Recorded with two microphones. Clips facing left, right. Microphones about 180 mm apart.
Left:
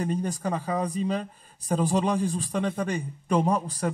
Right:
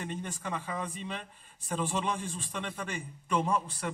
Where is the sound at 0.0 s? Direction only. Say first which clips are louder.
Left 10 dB; 40° left (ahead or behind).